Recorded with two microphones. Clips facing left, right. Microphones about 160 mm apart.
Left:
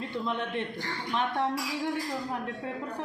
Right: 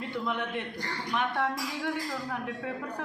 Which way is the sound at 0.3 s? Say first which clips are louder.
Left 1 dB; 20° left (ahead or behind).